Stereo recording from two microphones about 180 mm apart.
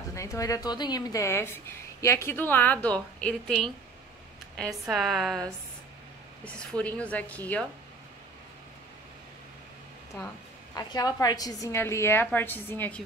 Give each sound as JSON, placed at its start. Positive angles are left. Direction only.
{"t": 0.1, "sound": "a woman's voice", "side_deg": 15}
{"t": 6.4, "sound": "a woman's voice", "side_deg": 5}
{"t": 10.8, "sound": "a woman's voice", "side_deg": 20}